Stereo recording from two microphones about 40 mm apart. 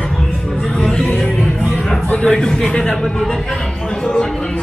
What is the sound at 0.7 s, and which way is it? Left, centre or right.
Music, centre.